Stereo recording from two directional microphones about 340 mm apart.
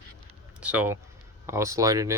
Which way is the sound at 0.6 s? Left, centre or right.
Centre.